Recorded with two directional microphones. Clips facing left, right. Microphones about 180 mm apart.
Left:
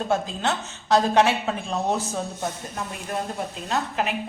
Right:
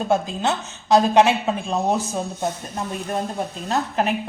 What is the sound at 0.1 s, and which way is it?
A woman's voice, 15° right (ahead or behind).